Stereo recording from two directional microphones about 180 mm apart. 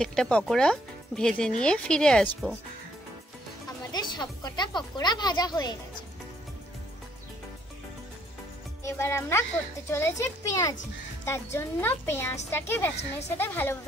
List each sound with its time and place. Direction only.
0.0 s speech: 5° left (ahead or behind)
3.9 s speech: 25° left (ahead or behind)
8.8 s a child's voice: 15° left (ahead or behind)